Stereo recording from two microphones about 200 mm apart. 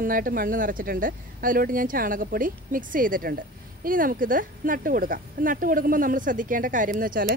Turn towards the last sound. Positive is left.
turn(degrees=-45)  # may be behind; listen again after turning